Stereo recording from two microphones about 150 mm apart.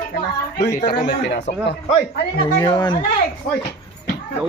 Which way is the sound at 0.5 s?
20° left (ahead or behind).